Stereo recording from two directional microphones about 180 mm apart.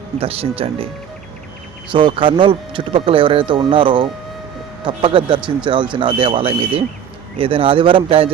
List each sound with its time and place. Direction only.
0.2 s speech: 30° right (ahead or behind)
1.9 s speech: 30° right (ahead or behind)